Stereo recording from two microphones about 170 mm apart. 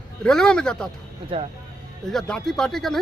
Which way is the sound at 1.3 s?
35° right (ahead or behind).